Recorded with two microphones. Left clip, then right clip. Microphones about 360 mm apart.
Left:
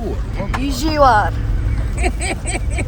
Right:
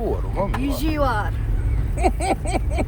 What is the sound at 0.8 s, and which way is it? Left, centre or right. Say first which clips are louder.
Speech: left 11 dB; centre.